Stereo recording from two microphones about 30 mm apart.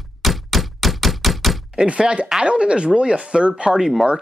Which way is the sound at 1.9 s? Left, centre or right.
Right.